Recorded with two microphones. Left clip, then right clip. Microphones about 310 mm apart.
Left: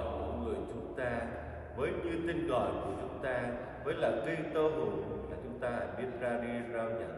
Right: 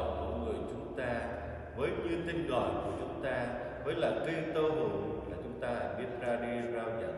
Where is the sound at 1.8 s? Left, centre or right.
Centre.